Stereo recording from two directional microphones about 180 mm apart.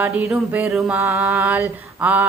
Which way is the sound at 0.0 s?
10° right (ahead or behind).